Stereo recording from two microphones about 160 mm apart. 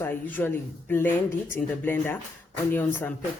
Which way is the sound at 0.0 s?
10° left (ahead or behind).